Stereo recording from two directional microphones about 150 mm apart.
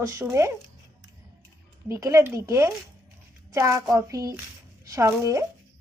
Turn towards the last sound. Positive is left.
turn(degrees=-20)  # may be behind; listen again after turning